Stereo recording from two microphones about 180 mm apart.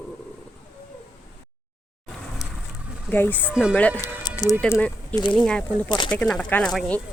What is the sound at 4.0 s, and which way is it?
Speech, 20° left (ahead or behind).